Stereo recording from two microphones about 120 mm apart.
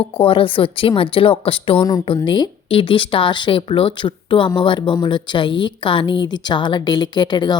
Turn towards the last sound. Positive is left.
turn(degrees=40)  # may be behind; listen again after turning